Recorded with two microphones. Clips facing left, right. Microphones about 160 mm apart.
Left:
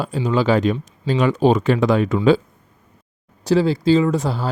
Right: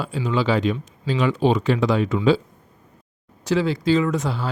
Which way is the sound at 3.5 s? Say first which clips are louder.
Left 4 dB; 35° left (ahead or behind).